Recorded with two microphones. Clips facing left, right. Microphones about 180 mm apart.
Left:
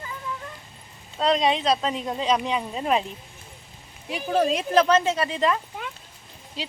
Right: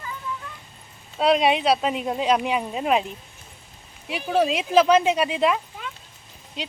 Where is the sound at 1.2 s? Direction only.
10° right (ahead or behind).